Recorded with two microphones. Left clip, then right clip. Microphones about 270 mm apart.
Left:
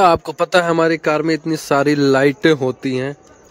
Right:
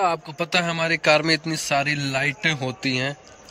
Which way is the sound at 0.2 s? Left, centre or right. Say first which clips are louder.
Left 8 dB; left.